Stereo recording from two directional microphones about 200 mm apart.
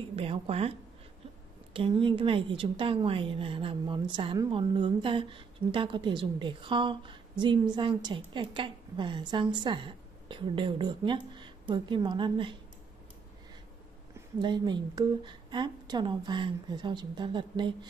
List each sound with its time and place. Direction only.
0.1 s a woman's voice: 30° right (ahead or behind)
14.4 s a woman's voice: 20° right (ahead or behind)